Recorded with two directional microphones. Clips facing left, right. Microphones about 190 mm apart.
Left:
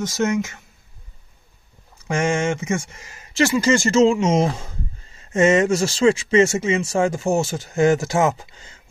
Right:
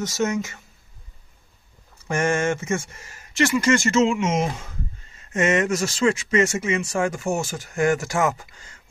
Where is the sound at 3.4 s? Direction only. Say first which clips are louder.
Left 2 dB; 30° left (ahead or behind).